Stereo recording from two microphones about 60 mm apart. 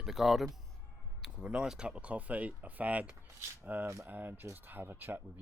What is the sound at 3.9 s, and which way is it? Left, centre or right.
Speech, right.